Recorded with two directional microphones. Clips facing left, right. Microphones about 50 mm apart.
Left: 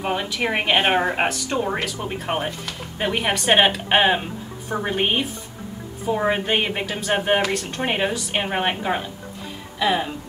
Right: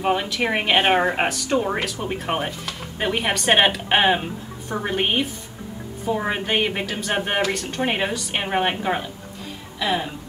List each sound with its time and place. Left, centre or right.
0.0 s a woman's voice: centre